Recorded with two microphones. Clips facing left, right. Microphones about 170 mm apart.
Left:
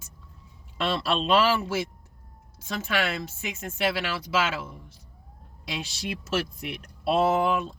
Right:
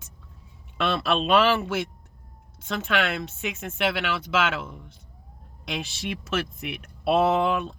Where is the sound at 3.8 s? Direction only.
65° right (ahead or behind).